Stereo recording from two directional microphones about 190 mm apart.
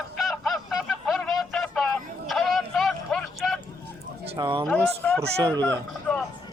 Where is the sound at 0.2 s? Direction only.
Centre (ahead or behind).